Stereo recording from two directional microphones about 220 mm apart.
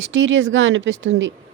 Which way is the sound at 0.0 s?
60° right (ahead or behind).